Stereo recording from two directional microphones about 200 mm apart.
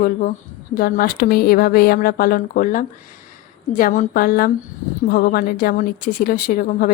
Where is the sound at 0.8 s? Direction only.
45° left (ahead or behind).